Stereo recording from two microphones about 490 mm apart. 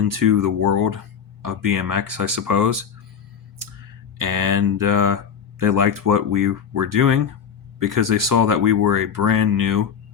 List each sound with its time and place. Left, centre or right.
0.0 s speech: right
4.2 s speech: right